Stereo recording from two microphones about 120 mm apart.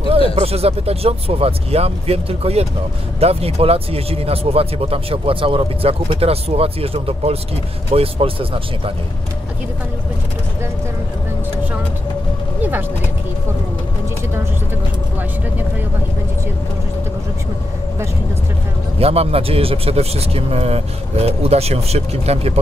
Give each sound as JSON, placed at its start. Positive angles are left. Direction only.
{"t": 0.4, "sound": "a man's voice", "side_deg": -55}
{"t": 18.9, "sound": "speech", "side_deg": -55}